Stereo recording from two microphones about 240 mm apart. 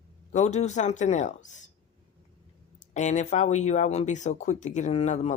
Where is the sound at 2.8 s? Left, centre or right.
Left.